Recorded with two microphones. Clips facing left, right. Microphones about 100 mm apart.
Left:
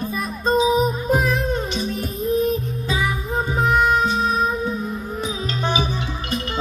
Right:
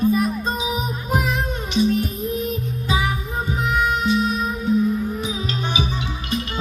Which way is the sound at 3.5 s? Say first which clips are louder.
Left 4 dB; 40° left (ahead or behind).